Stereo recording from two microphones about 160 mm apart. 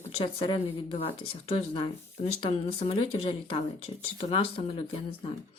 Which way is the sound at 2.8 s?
35° left (ahead or behind).